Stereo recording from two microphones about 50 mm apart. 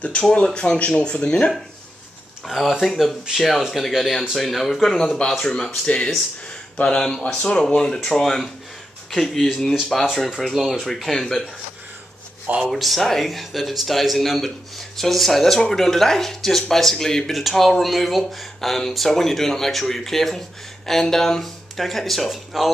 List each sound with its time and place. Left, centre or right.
0.3 s speech: centre
2.4 s speech: centre
12.4 s speech: right
12.7 s speech: centre